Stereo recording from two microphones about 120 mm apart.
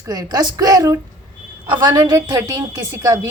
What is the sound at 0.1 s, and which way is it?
A woman's voice, 35° right (ahead or behind).